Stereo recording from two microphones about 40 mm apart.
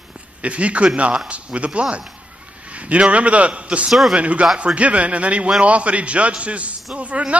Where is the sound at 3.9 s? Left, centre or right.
Centre.